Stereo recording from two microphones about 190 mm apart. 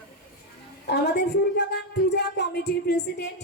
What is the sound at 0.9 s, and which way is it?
A woman's voice, 60° left (ahead or behind).